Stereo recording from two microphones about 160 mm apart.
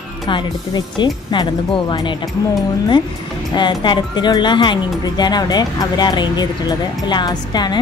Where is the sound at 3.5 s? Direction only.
30° left (ahead or behind).